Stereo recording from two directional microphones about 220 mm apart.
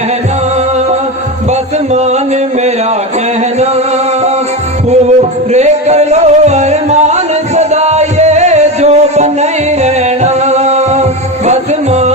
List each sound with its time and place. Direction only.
1.9 s music: 30° right (ahead or behind)
4.9 s music: 30° right (ahead or behind)